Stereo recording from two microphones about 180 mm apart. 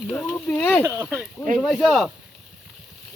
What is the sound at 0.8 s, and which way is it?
Speech, 15° right (ahead or behind).